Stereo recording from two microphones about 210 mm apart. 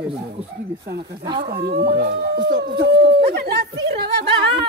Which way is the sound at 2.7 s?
50° right (ahead or behind).